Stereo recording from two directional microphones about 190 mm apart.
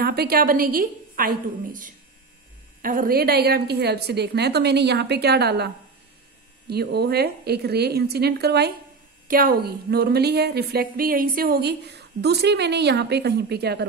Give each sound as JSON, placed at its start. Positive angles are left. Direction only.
{"t": 0.0, "sound": "a woman's voice", "side_deg": -55}
{"t": 6.7, "sound": "a woman's voice", "side_deg": -55}